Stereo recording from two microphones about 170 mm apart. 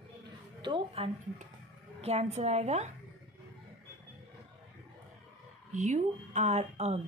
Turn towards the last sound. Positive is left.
turn(degrees=-40)  # may be behind; listen again after turning